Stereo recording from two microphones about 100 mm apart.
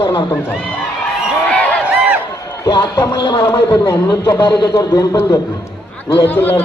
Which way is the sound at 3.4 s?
40° left (ahead or behind).